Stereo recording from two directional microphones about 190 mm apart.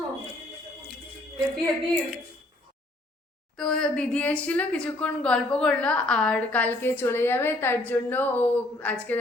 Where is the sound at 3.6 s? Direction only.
5° left (ahead or behind).